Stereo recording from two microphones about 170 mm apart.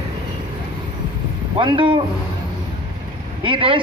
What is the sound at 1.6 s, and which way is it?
Speech, 30° right (ahead or behind).